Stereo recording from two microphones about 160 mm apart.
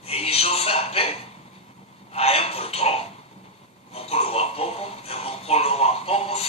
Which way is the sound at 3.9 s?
40° left (ahead or behind).